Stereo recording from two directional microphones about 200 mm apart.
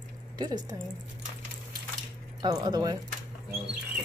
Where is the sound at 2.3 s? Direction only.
20° right (ahead or behind).